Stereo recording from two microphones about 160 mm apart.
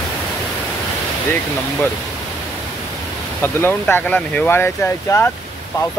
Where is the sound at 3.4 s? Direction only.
15° left (ahead or behind).